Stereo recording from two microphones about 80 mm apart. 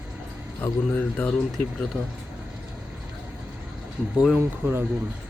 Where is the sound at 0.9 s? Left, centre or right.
Centre.